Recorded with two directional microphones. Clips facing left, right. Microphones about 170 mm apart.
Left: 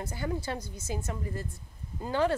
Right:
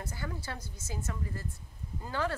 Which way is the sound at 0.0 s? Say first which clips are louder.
Left 7 dB; 20° left (ahead or behind).